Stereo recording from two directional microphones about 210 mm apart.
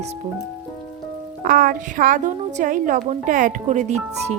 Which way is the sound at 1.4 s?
40° right (ahead or behind).